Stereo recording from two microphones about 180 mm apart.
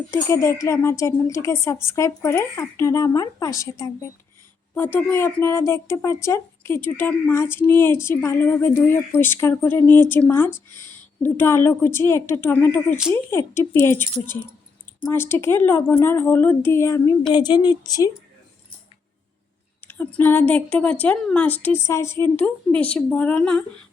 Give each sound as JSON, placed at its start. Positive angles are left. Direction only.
{"t": 0.1, "sound": "a woman's voice", "side_deg": 15}
{"t": 19.9, "sound": "a woman's voice", "side_deg": 10}